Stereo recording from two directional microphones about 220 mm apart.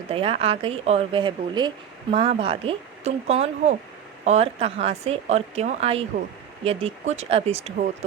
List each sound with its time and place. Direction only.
0.1 s speech: 25° right (ahead or behind)